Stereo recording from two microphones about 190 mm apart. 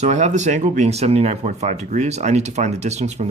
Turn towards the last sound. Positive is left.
turn(degrees=-35)  # may be behind; listen again after turning